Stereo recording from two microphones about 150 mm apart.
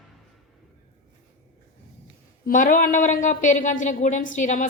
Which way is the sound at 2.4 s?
60° left (ahead or behind).